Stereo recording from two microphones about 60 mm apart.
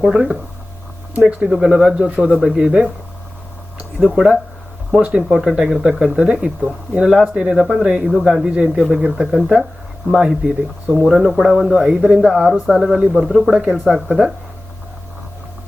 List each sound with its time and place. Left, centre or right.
0.0 s speech: centre
1.5 s speech: centre
4.0 s speech: right
11.1 s speech: centre
13.5 s speech: centre